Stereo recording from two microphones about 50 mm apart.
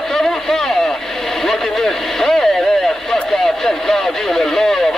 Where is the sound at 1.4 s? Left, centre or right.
Centre.